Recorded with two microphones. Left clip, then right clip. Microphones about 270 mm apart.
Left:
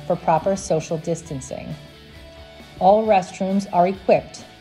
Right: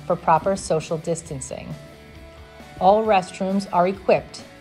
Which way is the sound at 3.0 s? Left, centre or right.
Centre.